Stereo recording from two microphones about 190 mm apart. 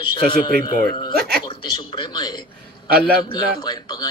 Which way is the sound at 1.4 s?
25° left (ahead or behind).